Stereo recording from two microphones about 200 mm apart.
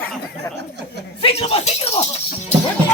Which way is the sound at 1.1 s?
30° left (ahead or behind).